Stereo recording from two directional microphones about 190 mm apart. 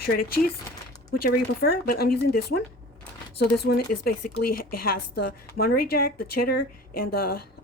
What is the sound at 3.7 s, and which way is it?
Speech, 60° left (ahead or behind).